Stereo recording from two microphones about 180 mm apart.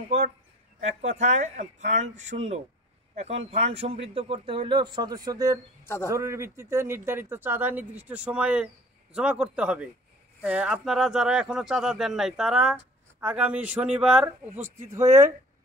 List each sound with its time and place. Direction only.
1.0 s a man's voice: 40° right (ahead or behind); by 14.5 s 5° right (ahead or behind)
14.9 s a man's voice: 15° right (ahead or behind)